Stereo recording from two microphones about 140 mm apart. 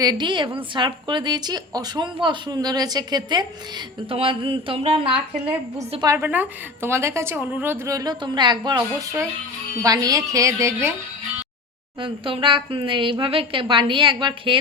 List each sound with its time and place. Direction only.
0.0 s a woman's voice: 30° right (ahead or behind)
6.1 s a woman's voice: 15° right (ahead or behind); by 8.8 s 30° right (ahead or behind)
9.8 s a woman's voice: 25° right (ahead or behind)
12.0 s a woman's voice: 35° right (ahead or behind)